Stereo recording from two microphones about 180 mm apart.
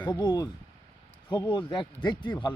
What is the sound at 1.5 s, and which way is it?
Speech, 25° left (ahead or behind).